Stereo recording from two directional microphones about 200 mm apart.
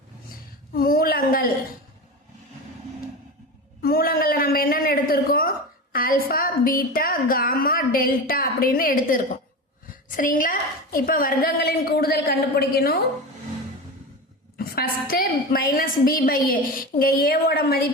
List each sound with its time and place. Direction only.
0.7 s a woman's voice: 45° left (ahead or behind)
3.8 s a man's voice: 50° left (ahead or behind)
14.6 s a man's voice: 45° left (ahead or behind)